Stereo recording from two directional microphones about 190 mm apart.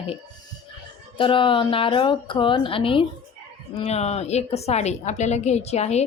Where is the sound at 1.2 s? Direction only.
25° left (ahead or behind).